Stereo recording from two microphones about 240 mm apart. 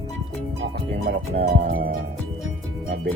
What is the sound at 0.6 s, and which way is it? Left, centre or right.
Speech, right.